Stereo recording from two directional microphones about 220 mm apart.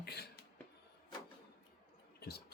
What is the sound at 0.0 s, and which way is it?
Music, 45° left (ahead or behind).